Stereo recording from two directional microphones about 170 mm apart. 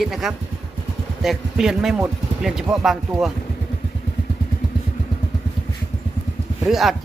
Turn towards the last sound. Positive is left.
turn(degrees=0)  # may be behind; listen again after turning